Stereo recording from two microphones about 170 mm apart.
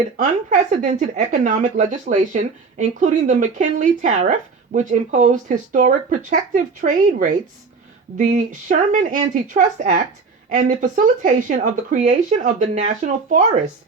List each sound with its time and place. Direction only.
0.2 s speech: 50° right (ahead or behind)